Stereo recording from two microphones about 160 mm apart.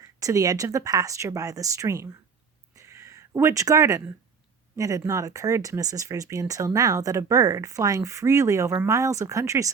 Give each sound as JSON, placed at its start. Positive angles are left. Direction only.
{"t": 0.0, "sound": "speech", "side_deg": -20}
{"t": 2.7, "sound": "a sound", "side_deg": -20}
{"t": 4.8, "sound": "speech", "side_deg": -20}